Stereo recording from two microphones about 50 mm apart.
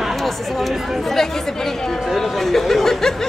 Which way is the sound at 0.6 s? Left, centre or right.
Centre.